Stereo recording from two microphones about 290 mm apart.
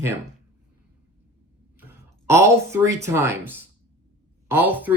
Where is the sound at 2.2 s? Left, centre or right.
Centre.